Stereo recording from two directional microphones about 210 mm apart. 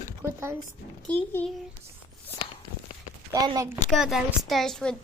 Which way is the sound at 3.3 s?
15° right (ahead or behind).